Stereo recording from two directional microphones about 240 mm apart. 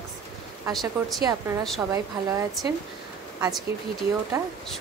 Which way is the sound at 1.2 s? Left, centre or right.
Centre.